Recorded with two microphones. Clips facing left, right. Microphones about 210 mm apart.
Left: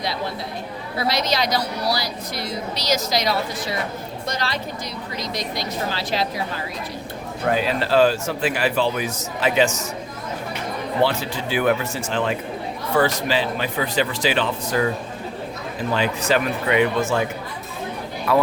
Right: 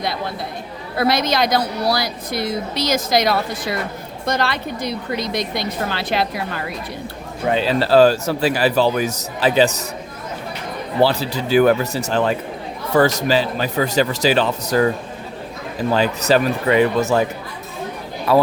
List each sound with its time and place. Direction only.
0.9 s a woman's voice: 55° right (ahead or behind)
7.4 s speech: 25° right (ahead or behind)
11.0 s speech: 35° right (ahead or behind)
16.0 s speech: 35° right (ahead or behind)
18.3 s speech: 30° right (ahead or behind)